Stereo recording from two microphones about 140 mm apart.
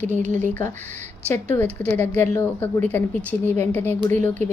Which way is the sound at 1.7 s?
15° left (ahead or behind).